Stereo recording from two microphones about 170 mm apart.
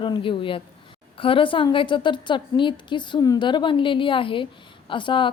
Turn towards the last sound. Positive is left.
turn(degrees=30)  # may be behind; listen again after turning